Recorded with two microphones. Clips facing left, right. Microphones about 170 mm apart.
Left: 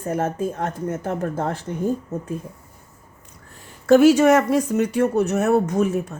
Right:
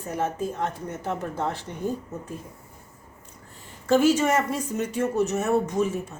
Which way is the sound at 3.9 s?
65° left (ahead or behind).